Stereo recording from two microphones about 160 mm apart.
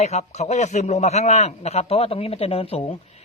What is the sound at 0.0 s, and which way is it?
A man's voice, 45° left (ahead or behind).